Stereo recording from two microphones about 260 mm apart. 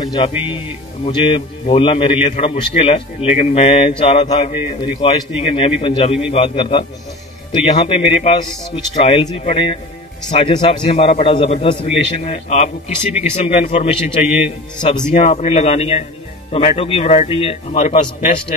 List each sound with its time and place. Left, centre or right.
0.0 s a man's voice: centre